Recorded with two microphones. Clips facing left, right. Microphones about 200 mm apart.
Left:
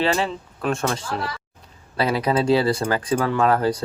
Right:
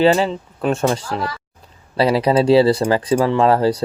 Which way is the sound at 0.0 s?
30° right (ahead or behind).